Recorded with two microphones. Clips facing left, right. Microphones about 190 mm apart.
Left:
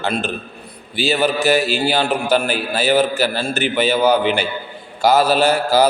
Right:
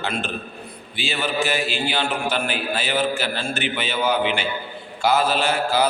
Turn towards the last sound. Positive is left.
turn(degrees=40)  # may be behind; listen again after turning